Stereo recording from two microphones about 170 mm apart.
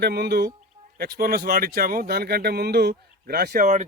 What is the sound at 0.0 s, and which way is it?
Speech, 70° right (ahead or behind).